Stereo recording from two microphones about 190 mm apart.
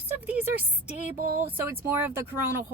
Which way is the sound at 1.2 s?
45° right (ahead or behind).